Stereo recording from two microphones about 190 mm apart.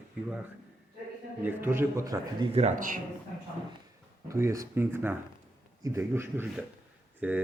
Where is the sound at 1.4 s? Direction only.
10° right (ahead or behind).